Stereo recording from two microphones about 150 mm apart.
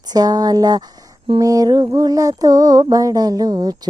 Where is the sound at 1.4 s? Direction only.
25° right (ahead or behind).